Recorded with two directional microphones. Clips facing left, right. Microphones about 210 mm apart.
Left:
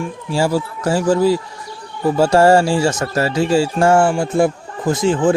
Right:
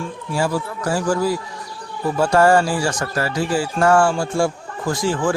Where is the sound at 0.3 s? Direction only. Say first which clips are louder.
Left 4 dB; 25° left (ahead or behind).